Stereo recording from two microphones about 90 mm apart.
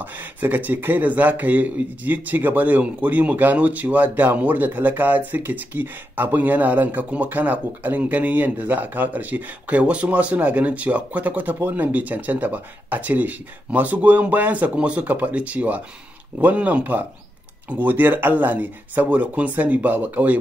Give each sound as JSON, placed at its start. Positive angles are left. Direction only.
{"t": 0.0, "sound": "speech", "side_deg": -20}